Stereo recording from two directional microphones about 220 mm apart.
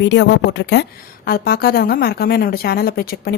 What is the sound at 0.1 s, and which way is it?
A woman's voice, 50° left (ahead or behind).